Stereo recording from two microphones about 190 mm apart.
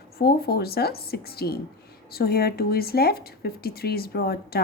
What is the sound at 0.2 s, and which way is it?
A woman's voice, 55° left (ahead or behind).